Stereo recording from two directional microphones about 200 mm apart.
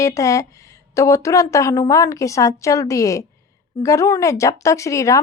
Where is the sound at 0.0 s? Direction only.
15° left (ahead or behind).